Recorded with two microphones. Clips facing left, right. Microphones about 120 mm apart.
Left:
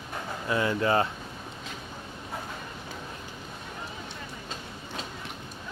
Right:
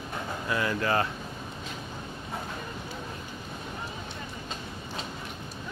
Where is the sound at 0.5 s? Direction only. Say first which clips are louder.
Left 3 dB; 25° left (ahead or behind).